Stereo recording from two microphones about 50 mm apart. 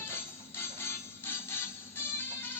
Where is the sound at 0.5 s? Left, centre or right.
Left.